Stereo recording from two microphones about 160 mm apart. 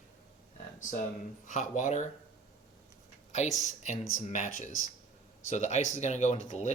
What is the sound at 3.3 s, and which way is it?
Speech, 45° left (ahead or behind).